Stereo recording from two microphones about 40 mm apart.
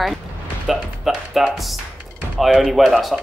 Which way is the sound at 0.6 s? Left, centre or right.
Centre.